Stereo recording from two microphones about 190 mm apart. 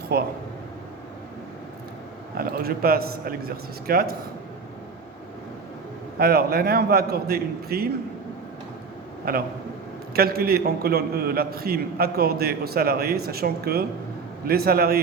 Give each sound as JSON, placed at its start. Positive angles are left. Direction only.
{"t": 0.1, "sound": "speech", "side_deg": -55}
{"t": 2.4, "sound": "a man's voice", "side_deg": -50}
{"t": 6.1, "sound": "a man's voice", "side_deg": -55}
{"t": 9.3, "sound": "a man's voice", "side_deg": -50}